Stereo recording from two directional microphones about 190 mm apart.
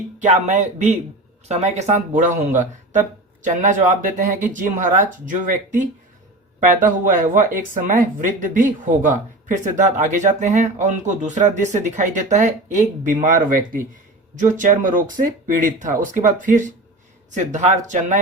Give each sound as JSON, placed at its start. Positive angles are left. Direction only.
{"t": 0.2, "sound": "speech", "side_deg": -40}